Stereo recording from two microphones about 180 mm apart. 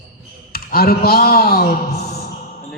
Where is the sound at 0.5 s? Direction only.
60° left (ahead or behind).